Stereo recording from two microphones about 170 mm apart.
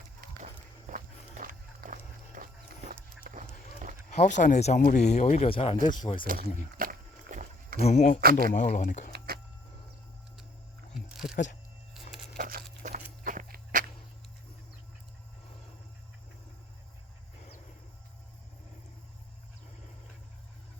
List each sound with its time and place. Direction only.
0.2 s walk: 55° right (ahead or behind)
0.9 s music: 50° right (ahead or behind)
3.3 s run: 60° right (ahead or behind)
4.1 s speech: 45° left (ahead or behind); by 6.2 s 25° left (ahead or behind)
6.7 s a sound: 50° right (ahead or behind)
7.8 s speech: 40° left (ahead or behind)
8.2 s speech: 60° right (ahead or behind)
8.5 s speech: 45° left (ahead or behind)
9.1 s a sound: 65° right (ahead or behind)
11.1 s a sound: centre (ahead or behind)
12.4 s patter: 60° right (ahead or behind)
12.8 s walk: 45° right (ahead or behind)